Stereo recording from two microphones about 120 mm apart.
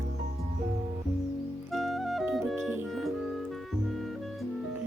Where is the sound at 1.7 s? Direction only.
Centre (ahead or behind).